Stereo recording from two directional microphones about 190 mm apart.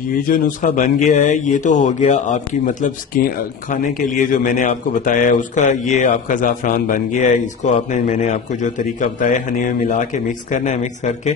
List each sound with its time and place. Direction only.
0.2 s a man's voice: 45° left (ahead or behind)